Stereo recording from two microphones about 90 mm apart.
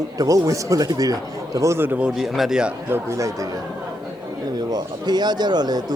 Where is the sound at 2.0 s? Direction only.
5° right (ahead or behind).